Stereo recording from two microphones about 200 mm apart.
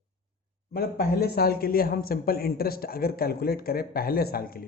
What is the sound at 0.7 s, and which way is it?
Speech, 50° left (ahead or behind).